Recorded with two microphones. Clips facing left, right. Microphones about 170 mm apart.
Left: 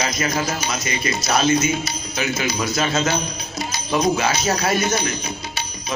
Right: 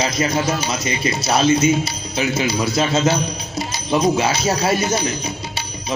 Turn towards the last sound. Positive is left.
turn(degrees=-30)  # may be behind; listen again after turning